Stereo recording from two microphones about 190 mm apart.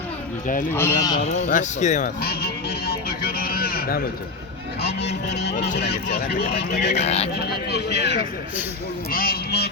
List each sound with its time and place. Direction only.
0.7 s speech: 10° left (ahead or behind)
1.2 s speech: 35° left (ahead or behind)
2.2 s speech: 55° left (ahead or behind)
4.9 s speech: 65° left (ahead or behind)
6.9 s speech: 35° left (ahead or behind)
7.3 s speech: 60° left (ahead or behind)